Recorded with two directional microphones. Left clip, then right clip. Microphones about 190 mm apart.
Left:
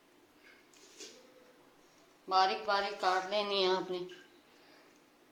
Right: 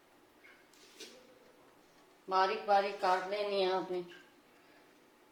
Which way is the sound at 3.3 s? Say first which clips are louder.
Left 2 dB; 50° left (ahead or behind).